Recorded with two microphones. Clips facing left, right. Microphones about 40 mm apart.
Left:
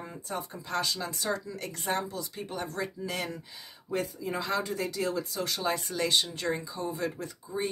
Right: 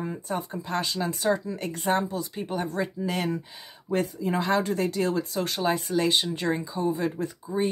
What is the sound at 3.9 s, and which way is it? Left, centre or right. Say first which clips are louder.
Speech: right 6 dB; right.